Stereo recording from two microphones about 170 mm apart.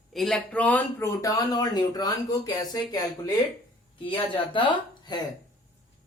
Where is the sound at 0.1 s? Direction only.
Centre (ahead or behind); by 4.6 s 30° left (ahead or behind).